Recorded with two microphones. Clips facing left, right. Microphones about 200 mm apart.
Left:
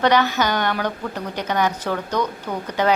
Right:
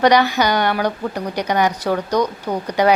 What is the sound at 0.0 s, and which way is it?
A woman's voice, 15° right (ahead or behind).